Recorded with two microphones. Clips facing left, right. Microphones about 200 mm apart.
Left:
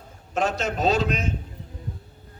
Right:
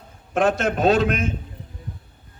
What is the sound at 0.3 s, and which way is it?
Speech, 55° right (ahead or behind).